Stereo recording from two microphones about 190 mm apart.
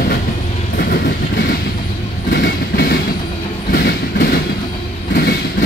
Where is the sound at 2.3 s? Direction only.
55° left (ahead or behind).